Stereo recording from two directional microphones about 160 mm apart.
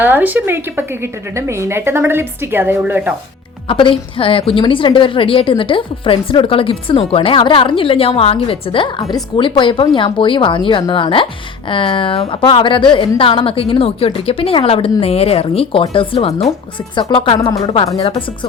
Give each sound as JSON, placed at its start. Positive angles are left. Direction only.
{"t": 0.0, "sound": "a woman's voice", "side_deg": -10}
{"t": 3.7, "sound": "a woman's voice", "side_deg": 30}